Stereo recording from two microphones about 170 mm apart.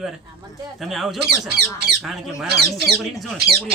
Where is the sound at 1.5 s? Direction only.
75° right (ahead or behind).